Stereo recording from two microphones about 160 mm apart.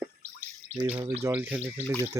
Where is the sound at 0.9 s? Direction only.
10° right (ahead or behind).